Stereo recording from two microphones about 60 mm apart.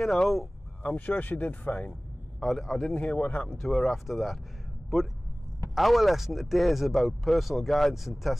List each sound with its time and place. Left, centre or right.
0.0 s speech: centre
0.9 s speech: left
2.4 s speech: centre
2.9 s speech: left
3.6 s speech: centre
5.8 s speech: centre